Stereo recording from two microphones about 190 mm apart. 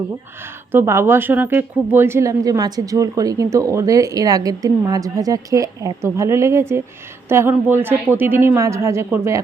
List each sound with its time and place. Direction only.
0.7 s speech: 15° right (ahead or behind)